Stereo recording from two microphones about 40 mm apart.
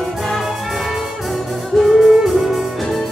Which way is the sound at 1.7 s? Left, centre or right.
Centre.